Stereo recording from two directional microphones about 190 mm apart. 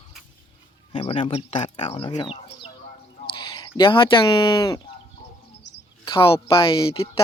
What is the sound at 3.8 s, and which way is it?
Speech, 25° left (ahead or behind).